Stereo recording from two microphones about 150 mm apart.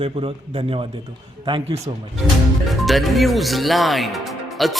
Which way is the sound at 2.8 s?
Centre (ahead or behind).